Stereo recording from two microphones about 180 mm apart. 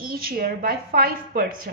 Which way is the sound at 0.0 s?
55° right (ahead or behind).